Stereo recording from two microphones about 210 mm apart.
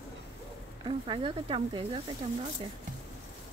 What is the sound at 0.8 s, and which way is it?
Speech, 20° right (ahead or behind).